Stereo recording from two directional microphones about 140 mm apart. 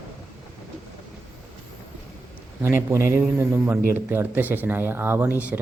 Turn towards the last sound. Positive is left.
turn(degrees=-10)  # may be behind; listen again after turning